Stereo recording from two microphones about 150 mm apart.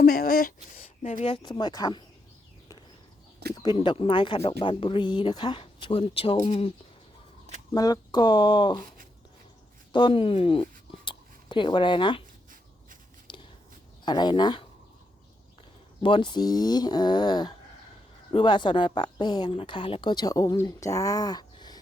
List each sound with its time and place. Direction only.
0.0 s speech: 85° left
1.0 s speech: 50° left (ahead or behind)
1.3 s speech: 35° left (ahead or behind)
3.5 s speech: 30° left (ahead or behind)
7.7 s speech: 25° left (ahead or behind)
9.9 s speech: 35° left (ahead or behind)
13.3 s whispering: 30° left (ahead or behind)
14.0 s a woman's voice: 30° left (ahead or behind)
16.0 s a woman's voice: 30° left (ahead or behind)